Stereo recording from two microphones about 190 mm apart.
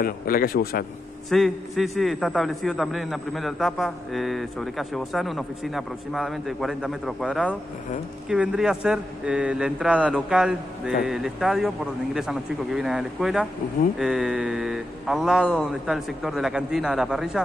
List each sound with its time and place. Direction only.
0.0 s a man's voice: 50° left (ahead or behind)
1.3 s a man's voice: centre (ahead or behind)